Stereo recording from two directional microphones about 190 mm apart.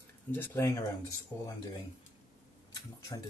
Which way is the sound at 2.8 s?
20° left (ahead or behind).